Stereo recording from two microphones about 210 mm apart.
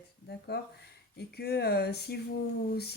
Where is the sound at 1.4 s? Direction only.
50° left (ahead or behind).